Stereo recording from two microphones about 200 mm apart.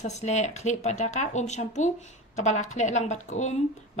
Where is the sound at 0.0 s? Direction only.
35° left (ahead or behind).